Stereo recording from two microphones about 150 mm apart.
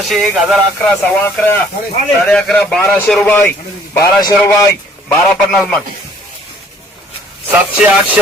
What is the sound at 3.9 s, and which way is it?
Speech, 20° left (ahead or behind).